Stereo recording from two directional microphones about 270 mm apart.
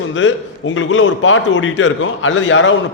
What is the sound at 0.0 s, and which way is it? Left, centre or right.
A man's voice, left.